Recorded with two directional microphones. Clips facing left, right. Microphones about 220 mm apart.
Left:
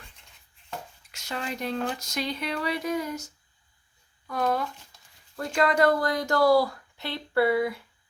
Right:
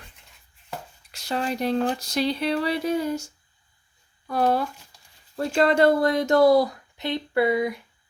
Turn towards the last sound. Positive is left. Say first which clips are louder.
# right 1 dB
turn(degrees=-15)  # may be behind; listen again after turning